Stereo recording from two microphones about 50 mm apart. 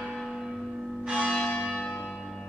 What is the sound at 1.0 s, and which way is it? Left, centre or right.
Church bell, centre.